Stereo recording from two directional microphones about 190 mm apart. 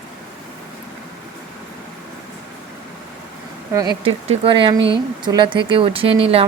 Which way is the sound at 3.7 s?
20° right (ahead or behind).